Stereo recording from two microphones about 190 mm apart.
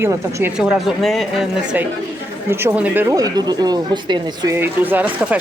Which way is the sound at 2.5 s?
15° right (ahead or behind).